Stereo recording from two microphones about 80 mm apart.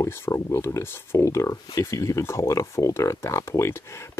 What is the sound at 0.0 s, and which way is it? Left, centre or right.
Speech, left.